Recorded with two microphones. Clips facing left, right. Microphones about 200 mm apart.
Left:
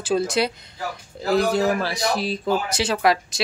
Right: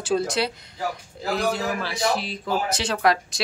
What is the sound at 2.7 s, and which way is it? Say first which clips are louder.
Speech: right 1 dB; 10° left (ahead or behind).